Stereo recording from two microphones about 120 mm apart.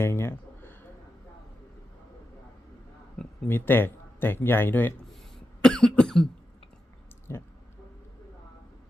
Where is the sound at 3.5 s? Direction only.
15° left (ahead or behind).